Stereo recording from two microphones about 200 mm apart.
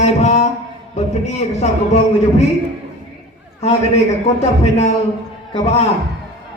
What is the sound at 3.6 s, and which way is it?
A man's voice, 35° left (ahead or behind).